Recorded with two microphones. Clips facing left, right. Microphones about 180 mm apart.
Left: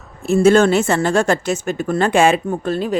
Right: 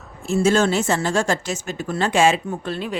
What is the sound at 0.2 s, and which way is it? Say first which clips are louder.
Speech: left 6 dB; 60° left (ahead or behind).